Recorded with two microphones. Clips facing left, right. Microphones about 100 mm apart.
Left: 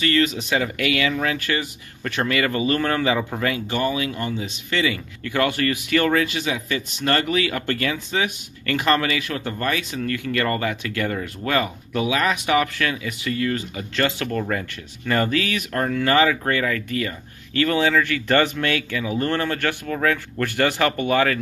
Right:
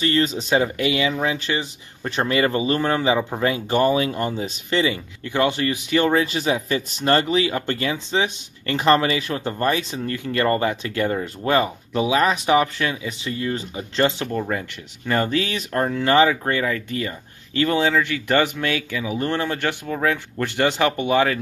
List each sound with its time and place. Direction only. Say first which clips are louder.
0.0 s speech: even; 30° right (ahead or behind)
3.6 s speech: right 5 dB; 40° right (ahead or behind); by 6.2 s 20° right (ahead or behind)
6.2 s speech: right 3 dB; 35° right (ahead or behind); by 21.4 s 20° right (ahead or behind)